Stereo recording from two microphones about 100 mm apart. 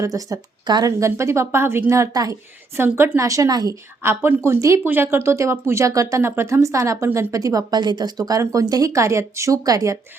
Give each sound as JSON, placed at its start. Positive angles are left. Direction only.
{"t": 0.0, "sound": "speech", "side_deg": -35}
{"t": 4.0, "sound": "speech", "side_deg": -25}